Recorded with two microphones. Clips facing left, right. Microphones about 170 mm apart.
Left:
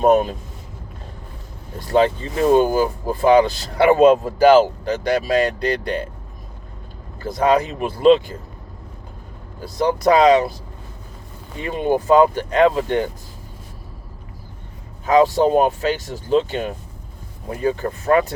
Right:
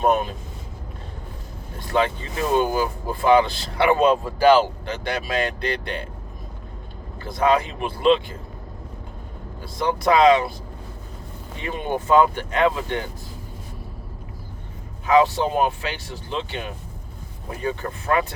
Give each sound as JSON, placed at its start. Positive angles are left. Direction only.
{"t": 0.0, "sound": "speech", "side_deg": 40}
{"t": 2.6, "sound": "speech", "side_deg": 40}
{"t": 7.2, "sound": "speech", "side_deg": 45}
{"t": 9.6, "sound": "speech", "side_deg": 45}
{"t": 11.6, "sound": "speech", "side_deg": 35}
{"t": 15.0, "sound": "speech", "side_deg": 40}